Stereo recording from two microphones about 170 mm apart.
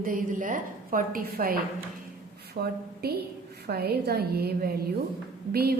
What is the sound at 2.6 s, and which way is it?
A woman's voice, 65° right (ahead or behind).